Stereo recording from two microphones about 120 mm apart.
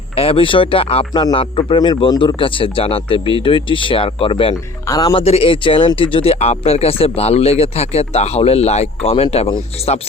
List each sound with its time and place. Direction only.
0.2 s a man's voice: 50° left (ahead or behind)
4.5 s speech: 30° left (ahead or behind)
5.2 s speech: 55° left (ahead or behind)